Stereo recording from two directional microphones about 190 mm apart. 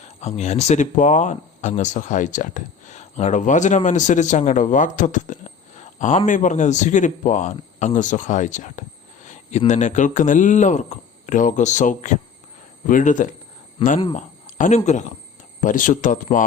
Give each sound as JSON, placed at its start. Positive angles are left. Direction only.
{"t": 0.0, "sound": "speech", "side_deg": 35}